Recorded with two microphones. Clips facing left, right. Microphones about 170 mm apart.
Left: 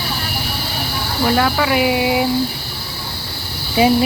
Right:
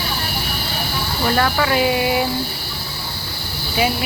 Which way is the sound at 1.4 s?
10° left (ahead or behind).